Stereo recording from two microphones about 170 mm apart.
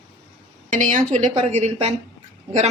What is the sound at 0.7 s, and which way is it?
A woman's voice, 50° right (ahead or behind).